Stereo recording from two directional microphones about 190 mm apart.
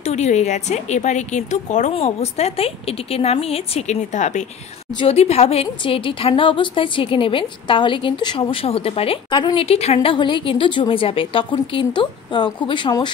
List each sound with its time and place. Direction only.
0.0 s a woman's voice: 35° left (ahead or behind)